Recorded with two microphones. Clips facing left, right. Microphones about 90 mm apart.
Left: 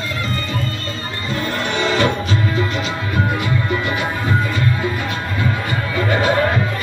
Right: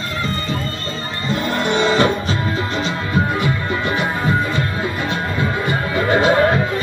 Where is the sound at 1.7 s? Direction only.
35° right (ahead or behind).